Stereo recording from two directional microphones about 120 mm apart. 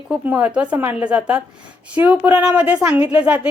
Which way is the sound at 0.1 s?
10° right (ahead or behind).